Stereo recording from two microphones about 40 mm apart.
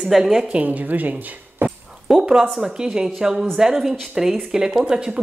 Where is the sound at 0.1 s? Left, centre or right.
Centre.